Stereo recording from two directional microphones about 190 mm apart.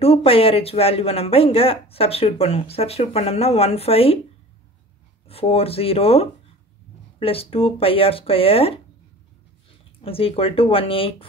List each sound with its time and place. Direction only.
0.0 s speech: 30° left (ahead or behind)
5.3 s speech: 30° left (ahead or behind)
10.0 s speech: 30° left (ahead or behind)